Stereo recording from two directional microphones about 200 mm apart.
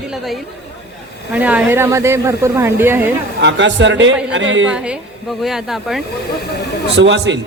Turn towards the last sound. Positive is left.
turn(degrees=-65)  # may be behind; listen again after turning